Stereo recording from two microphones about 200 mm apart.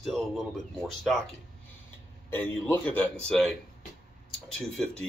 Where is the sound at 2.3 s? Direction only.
10° left (ahead or behind).